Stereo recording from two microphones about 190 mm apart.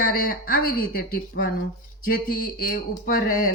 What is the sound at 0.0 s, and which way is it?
Speech, 50° left (ahead or behind).